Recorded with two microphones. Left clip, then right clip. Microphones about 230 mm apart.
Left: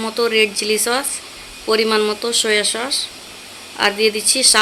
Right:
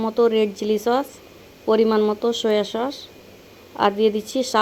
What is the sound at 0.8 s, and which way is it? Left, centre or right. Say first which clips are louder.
Speech: left 1 dB; centre.